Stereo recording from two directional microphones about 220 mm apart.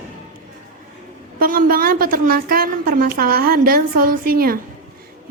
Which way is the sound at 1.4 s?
40° right (ahead or behind).